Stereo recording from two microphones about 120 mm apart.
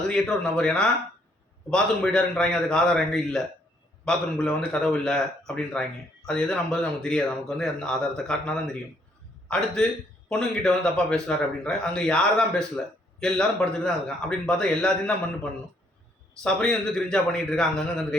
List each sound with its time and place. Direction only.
0.1 s a man's voice: 5° left (ahead or behind)
16.4 s a man's voice: 10° left (ahead or behind)